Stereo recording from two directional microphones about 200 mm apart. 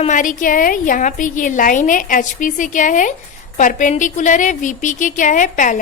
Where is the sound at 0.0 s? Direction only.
40° left (ahead or behind).